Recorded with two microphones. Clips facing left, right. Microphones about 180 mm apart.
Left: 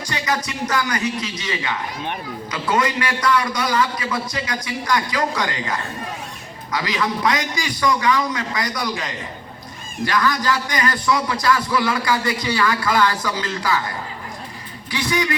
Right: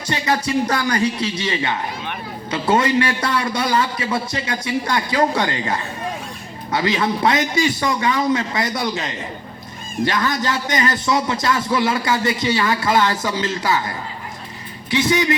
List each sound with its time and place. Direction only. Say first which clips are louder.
0.1 s music: right 4 dB; 30° right (ahead or behind)
0.7 s a man's voice: right 3 dB; 30° right (ahead or behind)
14.8 s a man's voice: right 4 dB; 25° right (ahead or behind)